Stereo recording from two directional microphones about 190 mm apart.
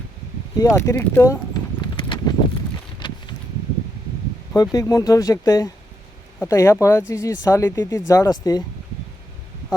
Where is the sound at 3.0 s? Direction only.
25° left (ahead or behind).